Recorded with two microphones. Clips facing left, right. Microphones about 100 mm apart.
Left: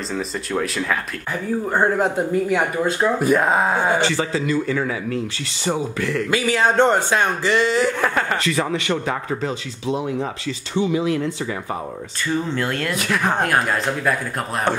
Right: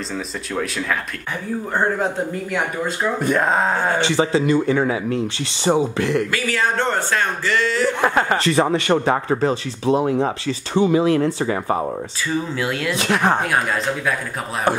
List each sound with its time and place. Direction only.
0.6 s speech: centre (ahead or behind)
4.0 s a man's voice: 20° right (ahead or behind)
6.3 s speech: 20° left (ahead or behind)
8.0 s a man's voice: 20° right (ahead or behind)
8.4 s speech: 35° right (ahead or behind)
12.5 s speech: 5° right (ahead or behind)
12.9 s a man's voice: 25° right (ahead or behind)